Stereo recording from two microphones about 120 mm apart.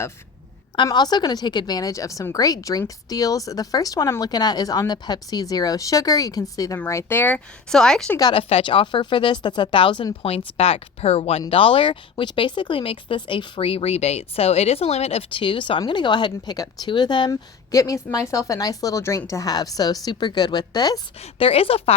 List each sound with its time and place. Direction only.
0.9 s a woman's voice: 35° left (ahead or behind); by 8.1 s 5° left (ahead or behind)
8.2 s speech: 50° left (ahead or behind)
10.3 s speech: 55° left (ahead or behind)
15.3 s a woman's voice: 45° left (ahead or behind)
17.7 s a woman's voice: 25° left (ahead or behind)
21.2 s speech: 50° left (ahead or behind)